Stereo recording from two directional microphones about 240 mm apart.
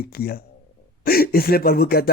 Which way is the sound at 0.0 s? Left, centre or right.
Left.